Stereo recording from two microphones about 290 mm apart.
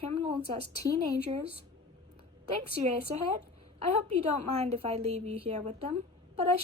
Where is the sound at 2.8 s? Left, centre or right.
Centre.